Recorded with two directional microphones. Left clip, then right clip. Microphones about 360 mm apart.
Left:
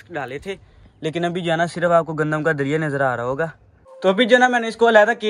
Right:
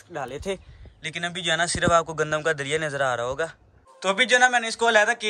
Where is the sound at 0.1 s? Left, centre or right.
Centre.